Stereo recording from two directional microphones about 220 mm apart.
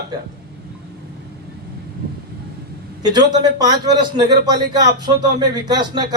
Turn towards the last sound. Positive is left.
turn(degrees=-20)  # may be behind; listen again after turning